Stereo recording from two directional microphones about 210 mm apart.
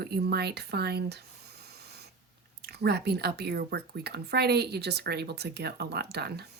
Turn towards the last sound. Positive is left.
turn(degrees=-50)  # may be behind; listen again after turning